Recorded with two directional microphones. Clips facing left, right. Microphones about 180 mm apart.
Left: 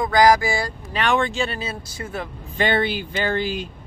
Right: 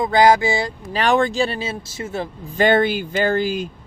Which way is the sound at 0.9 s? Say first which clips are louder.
Right 4 dB; 35° right (ahead or behind).